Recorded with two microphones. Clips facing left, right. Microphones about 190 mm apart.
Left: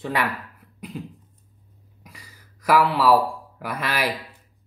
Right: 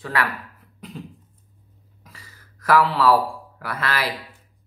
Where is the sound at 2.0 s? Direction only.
15° left (ahead or behind).